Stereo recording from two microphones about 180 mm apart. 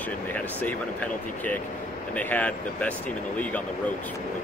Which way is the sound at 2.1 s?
10° left (ahead or behind).